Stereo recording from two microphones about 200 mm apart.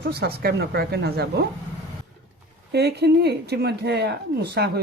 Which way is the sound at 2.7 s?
55° right (ahead or behind).